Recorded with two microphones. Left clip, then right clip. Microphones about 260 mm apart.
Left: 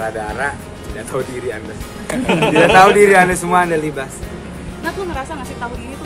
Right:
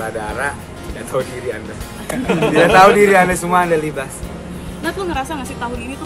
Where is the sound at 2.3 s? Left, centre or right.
Left.